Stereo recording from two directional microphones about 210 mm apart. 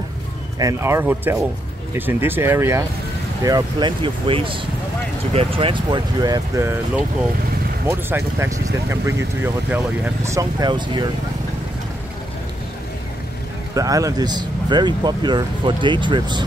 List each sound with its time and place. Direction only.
0.6 s speech: 15° right (ahead or behind)
7.8 s speech: 10° right (ahead or behind)
13.7 s speech: 15° right (ahead or behind)